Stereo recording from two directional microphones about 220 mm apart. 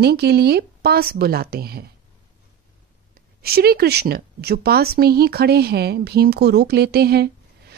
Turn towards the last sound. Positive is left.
turn(degrees=-45)  # may be behind; listen again after turning